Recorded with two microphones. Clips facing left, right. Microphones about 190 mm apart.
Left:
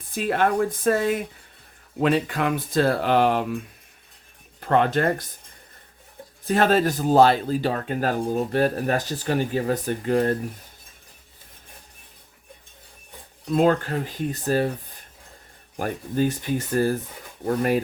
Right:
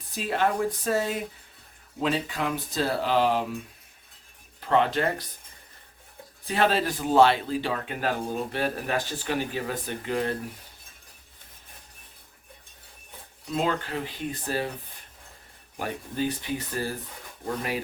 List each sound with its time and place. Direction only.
0.1 s speech: 55° left (ahead or behind)
4.6 s speech: 50° left (ahead or behind)
6.4 s speech: 45° left (ahead or behind)
13.5 s speech: 50° left (ahead or behind)
15.8 s speech: 50° left (ahead or behind)